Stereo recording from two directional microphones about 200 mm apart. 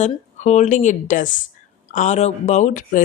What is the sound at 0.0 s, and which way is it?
A woman's voice, 35° left (ahead or behind).